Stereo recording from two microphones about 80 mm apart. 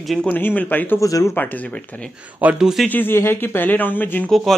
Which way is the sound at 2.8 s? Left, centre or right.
Left.